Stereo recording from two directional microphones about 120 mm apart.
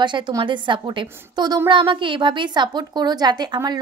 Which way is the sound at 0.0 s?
40° right (ahead or behind).